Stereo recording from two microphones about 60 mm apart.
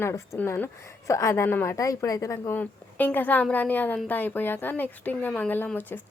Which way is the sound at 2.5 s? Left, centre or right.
Left.